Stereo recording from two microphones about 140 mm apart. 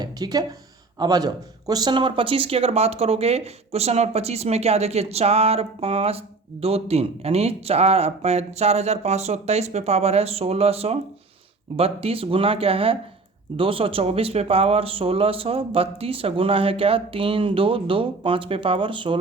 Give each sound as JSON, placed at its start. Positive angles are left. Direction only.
{"t": 0.0, "sound": "speech", "side_deg": -25}